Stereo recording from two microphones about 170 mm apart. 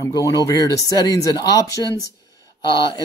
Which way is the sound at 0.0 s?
20° left (ahead or behind).